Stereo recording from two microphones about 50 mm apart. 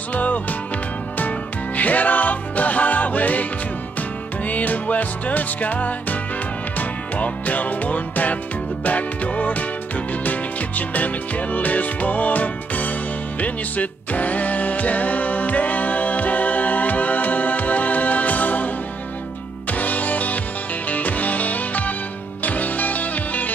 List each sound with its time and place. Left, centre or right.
0.1 s music: left
1.8 s music: left
4.5 s music: left
10.9 s music: left
19.7 s music: left